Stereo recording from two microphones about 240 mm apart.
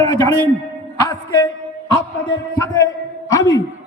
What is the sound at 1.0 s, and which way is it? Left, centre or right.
Speech, centre.